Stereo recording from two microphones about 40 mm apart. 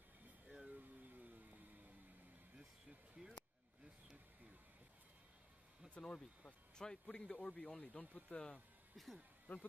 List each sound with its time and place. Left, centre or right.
0.7 s a sound: right
3.2 s speech: centre
5.9 s speech: left
8.9 s speech: centre
9.5 s speech: left